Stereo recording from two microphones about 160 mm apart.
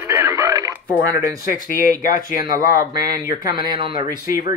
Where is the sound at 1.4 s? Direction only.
65° left (ahead or behind).